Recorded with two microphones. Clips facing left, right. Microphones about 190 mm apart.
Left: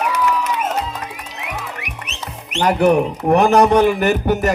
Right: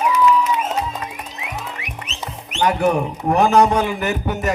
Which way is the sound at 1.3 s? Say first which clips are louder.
Left 2 dB; 70° left (ahead or behind).